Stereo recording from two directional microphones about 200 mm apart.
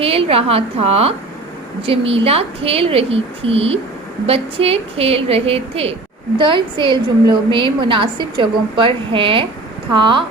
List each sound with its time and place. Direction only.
0.0 s a woman's voice: 30° right (ahead or behind)